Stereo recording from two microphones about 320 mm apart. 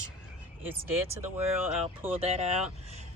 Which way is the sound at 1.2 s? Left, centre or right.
Centre.